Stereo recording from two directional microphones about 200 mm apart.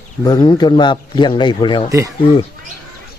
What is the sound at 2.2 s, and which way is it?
Speech, 25° left (ahead or behind).